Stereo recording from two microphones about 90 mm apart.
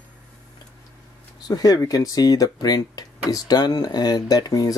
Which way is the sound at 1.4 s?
45° left (ahead or behind).